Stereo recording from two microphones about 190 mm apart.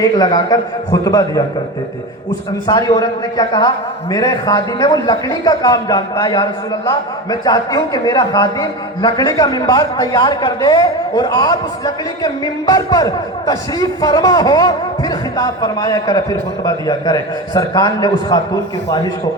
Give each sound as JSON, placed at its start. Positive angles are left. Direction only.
{"t": 0.0, "sound": "a man's voice", "side_deg": 20}
{"t": 2.6, "sound": "a man's voice", "side_deg": 20}